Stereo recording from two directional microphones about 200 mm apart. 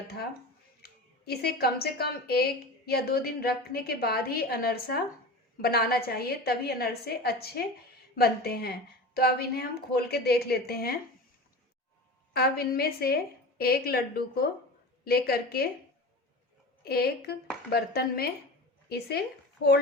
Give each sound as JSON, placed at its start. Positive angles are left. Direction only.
{"t": 0.8, "sound": "speech", "side_deg": 50}
{"t": 12.3, "sound": "speech", "side_deg": 50}
{"t": 16.8, "sound": "speech", "side_deg": 50}